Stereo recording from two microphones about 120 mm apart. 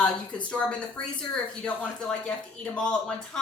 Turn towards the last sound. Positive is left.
turn(degrees=5)  # may be behind; listen again after turning